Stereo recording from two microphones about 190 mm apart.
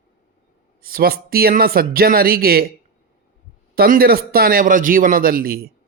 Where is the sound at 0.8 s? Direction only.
50° right (ahead or behind).